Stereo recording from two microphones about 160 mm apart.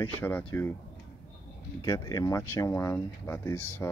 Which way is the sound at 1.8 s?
20° left (ahead or behind).